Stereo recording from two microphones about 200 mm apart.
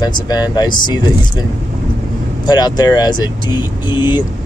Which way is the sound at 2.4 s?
20° left (ahead or behind).